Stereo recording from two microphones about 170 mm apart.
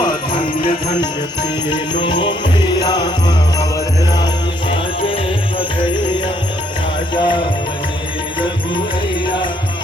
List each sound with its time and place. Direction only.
1.7 s music: 25° left (ahead or behind)
4.7 s music: 35° left (ahead or behind)
7.1 s music: 30° left (ahead or behind)